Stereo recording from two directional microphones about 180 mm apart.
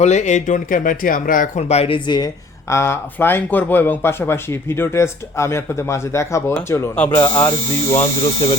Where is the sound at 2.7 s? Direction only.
15° left (ahead or behind).